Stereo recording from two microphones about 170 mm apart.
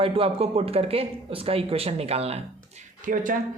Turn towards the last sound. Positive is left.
turn(degrees=-50)  # may be behind; listen again after turning